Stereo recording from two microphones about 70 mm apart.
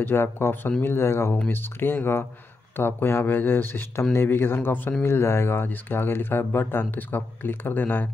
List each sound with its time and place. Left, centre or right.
0.0 s speech: left